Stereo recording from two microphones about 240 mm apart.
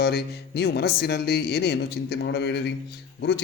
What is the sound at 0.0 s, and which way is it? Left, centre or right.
Speech, left.